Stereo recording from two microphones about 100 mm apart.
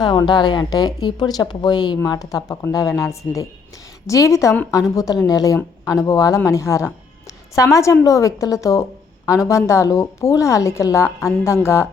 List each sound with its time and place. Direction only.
0.0 s a woman's voice: 45° left (ahead or behind); by 11.9 s 25° left (ahead or behind)